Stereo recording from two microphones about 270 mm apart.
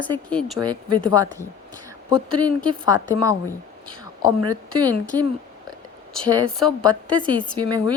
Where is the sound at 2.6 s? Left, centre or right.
Centre.